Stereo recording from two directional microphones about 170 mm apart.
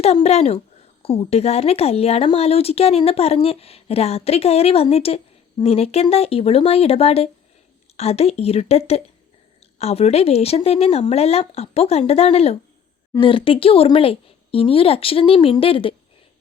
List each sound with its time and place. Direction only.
0.0 s a woman's voice: 40° left (ahead or behind)